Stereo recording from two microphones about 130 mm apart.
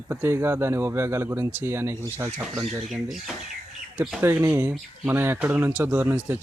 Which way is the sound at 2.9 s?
Centre (ahead or behind).